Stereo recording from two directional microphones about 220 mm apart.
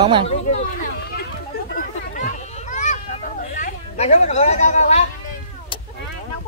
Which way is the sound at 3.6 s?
30° left (ahead or behind).